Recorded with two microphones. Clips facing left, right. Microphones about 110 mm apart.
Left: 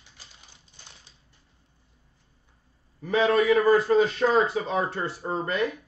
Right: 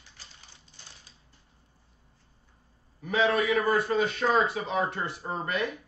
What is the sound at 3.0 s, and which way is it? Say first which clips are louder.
A man's voice: left 4 dB; 30° left (ahead or behind).